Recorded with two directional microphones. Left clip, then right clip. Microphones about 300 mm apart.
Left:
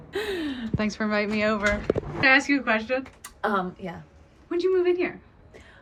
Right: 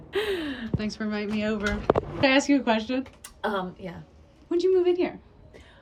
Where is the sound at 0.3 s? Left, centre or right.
Centre.